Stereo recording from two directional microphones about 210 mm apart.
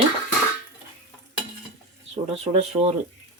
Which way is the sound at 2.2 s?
30° right (ahead or behind).